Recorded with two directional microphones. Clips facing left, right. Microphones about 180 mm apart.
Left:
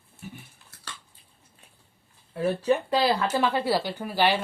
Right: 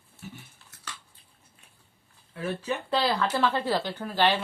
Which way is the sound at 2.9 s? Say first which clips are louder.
Left 2 dB; 10° left (ahead or behind).